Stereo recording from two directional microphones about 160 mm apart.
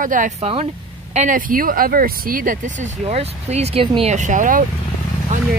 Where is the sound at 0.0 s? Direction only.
55° right (ahead or behind); by 4.1 s 35° right (ahead or behind).